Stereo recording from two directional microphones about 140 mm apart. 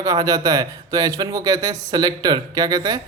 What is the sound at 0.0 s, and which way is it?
Speech, 25° right (ahead or behind).